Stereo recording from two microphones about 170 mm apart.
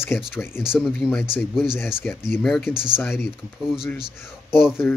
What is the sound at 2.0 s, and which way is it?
Speech, 15° left (ahead or behind).